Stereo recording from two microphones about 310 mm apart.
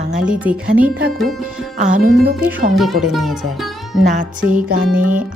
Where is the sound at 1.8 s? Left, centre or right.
Right.